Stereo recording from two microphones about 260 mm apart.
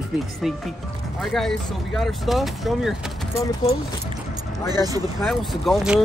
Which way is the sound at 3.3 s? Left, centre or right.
Centre.